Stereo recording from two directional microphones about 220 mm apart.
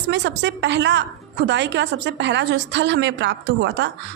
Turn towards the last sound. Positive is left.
turn(degrees=-55)  # may be behind; listen again after turning